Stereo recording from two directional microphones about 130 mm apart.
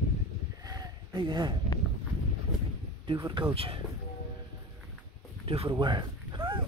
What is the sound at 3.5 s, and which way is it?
Speech, 45° right (ahead or behind).